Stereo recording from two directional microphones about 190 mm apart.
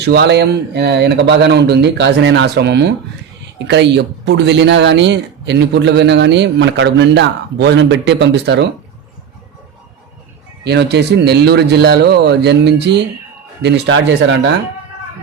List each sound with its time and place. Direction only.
0.0 s speech: 60° right (ahead or behind)
10.6 s speech: 65° right (ahead or behind)